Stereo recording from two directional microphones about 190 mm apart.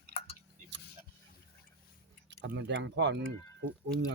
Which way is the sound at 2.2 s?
70° right (ahead or behind).